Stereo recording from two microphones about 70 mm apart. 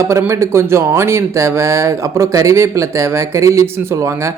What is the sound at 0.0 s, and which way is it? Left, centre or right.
Speech, right.